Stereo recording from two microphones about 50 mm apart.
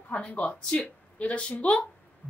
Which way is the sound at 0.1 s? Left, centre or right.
Left.